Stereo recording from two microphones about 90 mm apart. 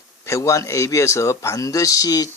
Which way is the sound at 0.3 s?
35° left (ahead or behind).